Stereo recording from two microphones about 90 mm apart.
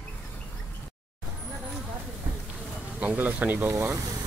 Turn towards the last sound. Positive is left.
turn(degrees=-30)  # may be behind; listen again after turning